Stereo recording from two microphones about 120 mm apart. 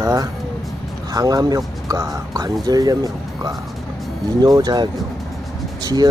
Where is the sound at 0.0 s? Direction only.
30° right (ahead or behind).